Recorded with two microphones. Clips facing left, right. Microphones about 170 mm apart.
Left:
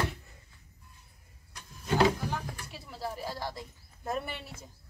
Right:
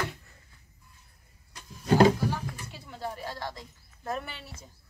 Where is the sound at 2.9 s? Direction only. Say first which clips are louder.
Even; 5° left (ahead or behind).